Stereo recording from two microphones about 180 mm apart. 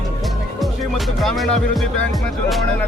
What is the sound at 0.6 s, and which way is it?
Speech, centre (ahead or behind).